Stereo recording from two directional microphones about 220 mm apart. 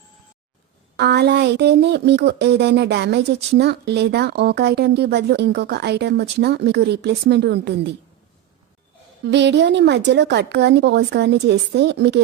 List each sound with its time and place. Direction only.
0.9 s speech: 50° right (ahead or behind)
9.2 s speech: 50° right (ahead or behind)